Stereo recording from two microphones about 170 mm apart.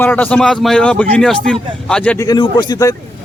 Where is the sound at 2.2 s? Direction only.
20° left (ahead or behind).